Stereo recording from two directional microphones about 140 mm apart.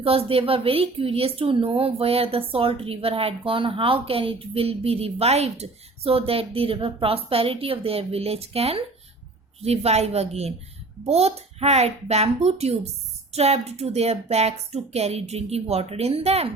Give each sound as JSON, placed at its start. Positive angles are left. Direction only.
{"t": 0.0, "sound": "a woman's voice", "side_deg": -45}